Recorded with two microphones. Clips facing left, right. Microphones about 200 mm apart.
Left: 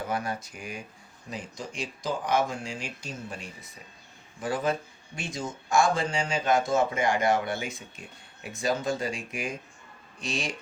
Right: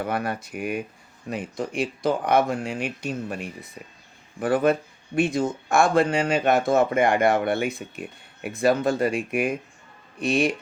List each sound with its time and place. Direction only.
0.0 s speech: 60° right (ahead or behind)